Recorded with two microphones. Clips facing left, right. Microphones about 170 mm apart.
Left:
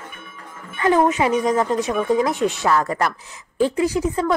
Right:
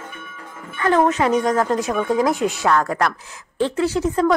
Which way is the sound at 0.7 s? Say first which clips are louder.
Even; 20° left (ahead or behind).